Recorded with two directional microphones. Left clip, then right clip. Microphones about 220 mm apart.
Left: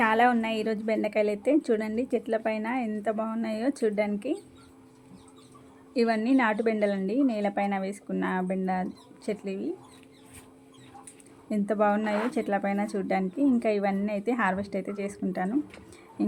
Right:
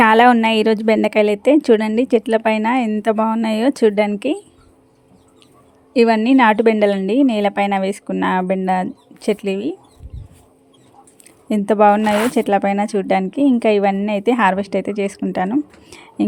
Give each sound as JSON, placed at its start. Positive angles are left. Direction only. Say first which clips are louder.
{"t": 0.0, "sound": "speech", "louder": "right 12 dB", "side_deg": -45}
{"t": 5.9, "sound": "speech", "louder": "right 12 dB", "side_deg": -40}
{"t": 11.4, "sound": "speech", "louder": "right 13 dB", "side_deg": -35}